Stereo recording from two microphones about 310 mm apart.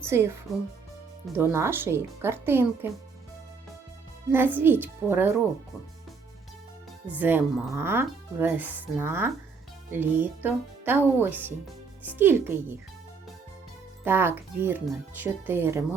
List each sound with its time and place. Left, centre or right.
0.0 s speech: centre
1.4 s speech: centre
4.3 s speech: centre
7.1 s speech: centre
14.0 s speech: centre